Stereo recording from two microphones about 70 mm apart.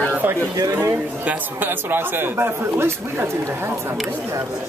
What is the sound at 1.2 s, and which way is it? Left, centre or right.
Speech, right.